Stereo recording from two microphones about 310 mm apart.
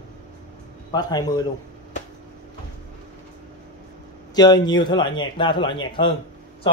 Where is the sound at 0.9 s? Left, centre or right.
Centre.